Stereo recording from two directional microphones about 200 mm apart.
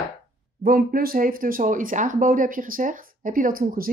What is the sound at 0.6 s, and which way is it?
Speech, 45° right (ahead or behind).